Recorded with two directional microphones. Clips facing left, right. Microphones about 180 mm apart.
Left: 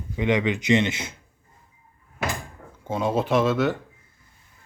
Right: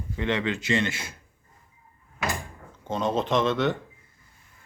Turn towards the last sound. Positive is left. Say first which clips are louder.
# left 2 dB
turn(degrees=5)  # may be behind; listen again after turning